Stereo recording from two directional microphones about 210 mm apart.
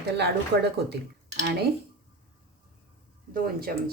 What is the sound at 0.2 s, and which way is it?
Speech, 55° right (ahead or behind).